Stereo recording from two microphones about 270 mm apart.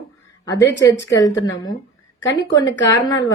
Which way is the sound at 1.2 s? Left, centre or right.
Centre.